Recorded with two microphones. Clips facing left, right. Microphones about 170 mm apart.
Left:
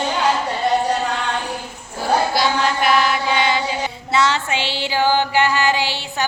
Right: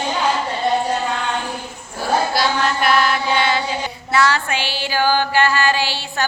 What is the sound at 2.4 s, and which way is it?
Chant, 15° left (ahead or behind).